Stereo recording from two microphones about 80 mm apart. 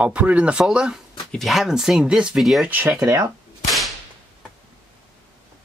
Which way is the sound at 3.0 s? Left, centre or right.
Right.